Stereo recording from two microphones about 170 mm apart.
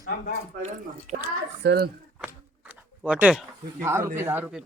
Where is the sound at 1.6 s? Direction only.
75° right (ahead or behind).